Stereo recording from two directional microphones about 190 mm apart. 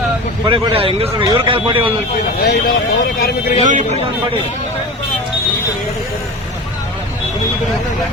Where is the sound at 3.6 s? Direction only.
40° right (ahead or behind).